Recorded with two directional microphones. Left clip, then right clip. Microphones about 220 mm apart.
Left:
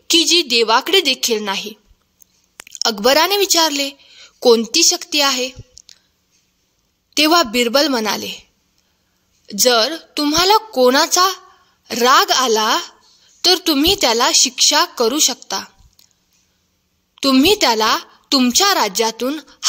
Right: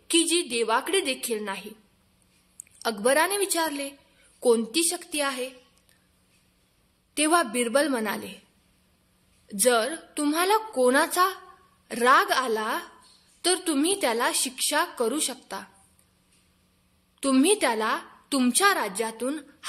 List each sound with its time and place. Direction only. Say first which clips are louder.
0.1 s a woman's voice: left 11 dB; 35° left (ahead or behind)
7.2 s a woman's voice: left 10 dB; 35° left (ahead or behind)
9.5 s a woman's voice: left 9 dB; 35° left (ahead or behind)
17.1 s a woman's voice: left 9 dB; 35° left (ahead or behind)